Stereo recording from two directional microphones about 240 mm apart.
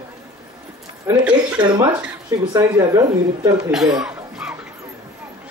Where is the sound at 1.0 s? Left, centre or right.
Centre.